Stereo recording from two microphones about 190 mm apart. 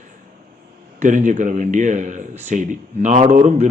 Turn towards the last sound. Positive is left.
turn(degrees=-40)  # may be behind; listen again after turning